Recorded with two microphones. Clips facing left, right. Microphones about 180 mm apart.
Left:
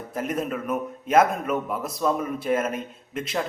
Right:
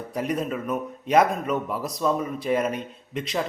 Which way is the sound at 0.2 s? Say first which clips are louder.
Right 1 dB; centre (ahead or behind).